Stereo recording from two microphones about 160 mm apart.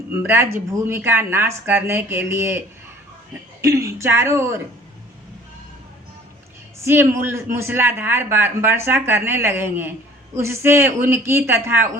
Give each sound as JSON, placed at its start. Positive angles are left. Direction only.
{"t": 0.1, "sound": "a man's voice", "side_deg": -15}
{"t": 6.8, "sound": "a man's voice", "side_deg": -15}